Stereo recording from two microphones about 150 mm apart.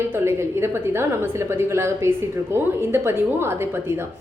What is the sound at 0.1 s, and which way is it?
A woman's voice, 15° right (ahead or behind).